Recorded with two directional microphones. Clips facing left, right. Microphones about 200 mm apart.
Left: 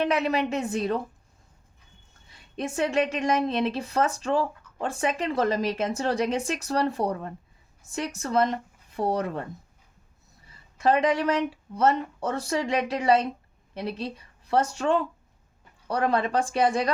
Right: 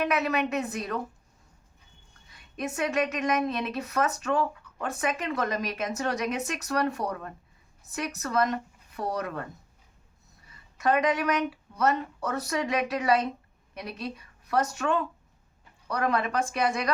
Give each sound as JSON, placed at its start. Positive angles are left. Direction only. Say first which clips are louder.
{"t": 0.0, "sound": "speech", "louder": "left 2 dB", "side_deg": 30}
{"t": 2.3, "sound": "speech", "louder": "left 3 dB", "side_deg": 30}
{"t": 10.5, "sound": "speech", "louder": "left 3 dB", "side_deg": 30}